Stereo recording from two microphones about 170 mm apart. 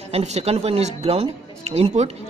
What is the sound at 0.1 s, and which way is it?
A man's voice, 40° right (ahead or behind).